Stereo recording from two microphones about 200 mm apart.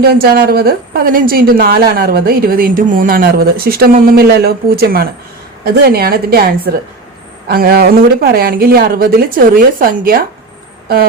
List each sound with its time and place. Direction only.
0.0 s speech: 50° right (ahead or behind)